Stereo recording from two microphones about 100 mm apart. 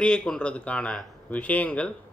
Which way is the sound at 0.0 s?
10° left (ahead or behind).